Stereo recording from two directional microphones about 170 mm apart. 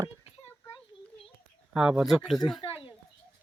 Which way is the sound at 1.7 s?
5° right (ahead or behind).